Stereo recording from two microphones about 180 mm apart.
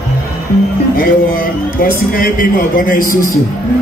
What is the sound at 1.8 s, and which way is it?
A man's voice, 50° left (ahead or behind).